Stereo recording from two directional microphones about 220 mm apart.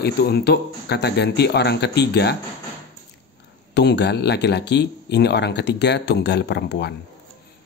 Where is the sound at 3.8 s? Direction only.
50° left (ahead or behind).